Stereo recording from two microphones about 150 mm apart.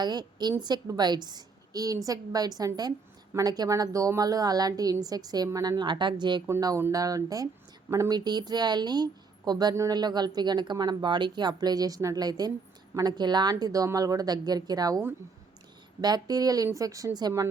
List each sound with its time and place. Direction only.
0.0 s a woman's voice: 30° right (ahead or behind)